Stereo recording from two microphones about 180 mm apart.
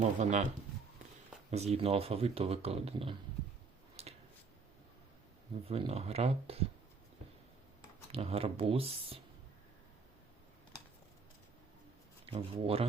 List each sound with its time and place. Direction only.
0.2 s speech: 40° right (ahead or behind)
1.5 s speech: 35° right (ahead or behind)
4.0 s a sound: 35° right (ahead or behind)
5.6 s speech: 35° right (ahead or behind)
8.1 s speech: 35° right (ahead or behind)
12.2 s speech: 30° right (ahead or behind)